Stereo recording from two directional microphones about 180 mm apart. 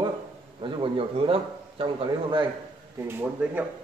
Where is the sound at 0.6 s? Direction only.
30° right (ahead or behind).